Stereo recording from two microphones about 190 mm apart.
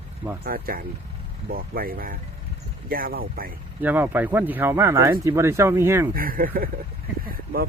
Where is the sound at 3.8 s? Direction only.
10° right (ahead or behind).